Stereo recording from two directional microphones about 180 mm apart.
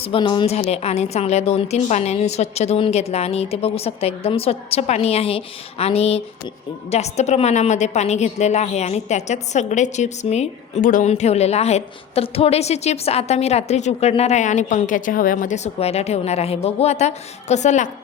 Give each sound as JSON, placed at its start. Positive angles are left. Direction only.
{"t": 0.0, "sound": "a woman's voice", "side_deg": 30}
{"t": 11.1, "sound": "a woman's voice", "side_deg": 35}